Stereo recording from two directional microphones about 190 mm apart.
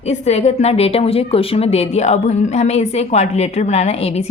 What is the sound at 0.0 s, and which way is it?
A woman's voice, 35° left (ahead or behind).